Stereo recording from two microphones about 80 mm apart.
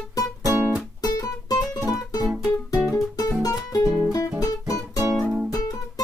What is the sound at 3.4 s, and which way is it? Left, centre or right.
Music, left.